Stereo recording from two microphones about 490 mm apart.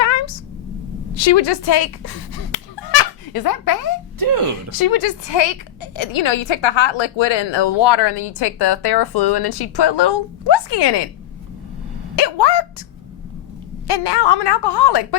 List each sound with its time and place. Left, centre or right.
0.0 s a sound: left
1.1 s a woman's voice: left
4.2 s speech: right
4.8 s a woman's voice: left
12.1 s dog: left
13.8 s a woman's voice: left